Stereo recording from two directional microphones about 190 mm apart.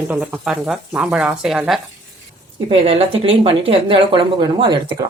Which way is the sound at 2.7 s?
30° right (ahead or behind).